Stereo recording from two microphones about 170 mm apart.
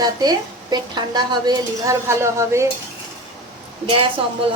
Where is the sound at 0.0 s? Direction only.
25° right (ahead or behind).